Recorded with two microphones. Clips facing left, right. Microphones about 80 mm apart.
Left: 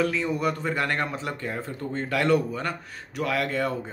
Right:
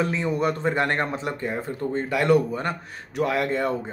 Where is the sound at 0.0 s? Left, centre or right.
Right.